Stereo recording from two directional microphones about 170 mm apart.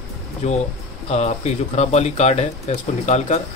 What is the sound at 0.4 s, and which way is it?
Speech, 40° left (ahead or behind).